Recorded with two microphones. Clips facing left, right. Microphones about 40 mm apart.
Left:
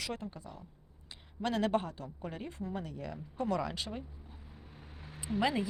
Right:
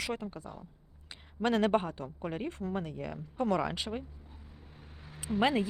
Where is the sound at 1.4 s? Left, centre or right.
Right.